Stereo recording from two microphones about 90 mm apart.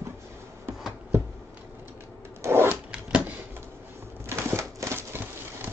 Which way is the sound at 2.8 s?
15° right (ahead or behind).